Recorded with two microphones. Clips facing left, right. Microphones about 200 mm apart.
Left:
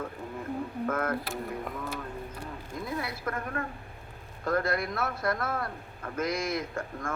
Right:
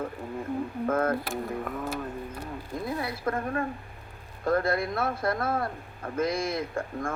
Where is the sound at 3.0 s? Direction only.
30° right (ahead or behind).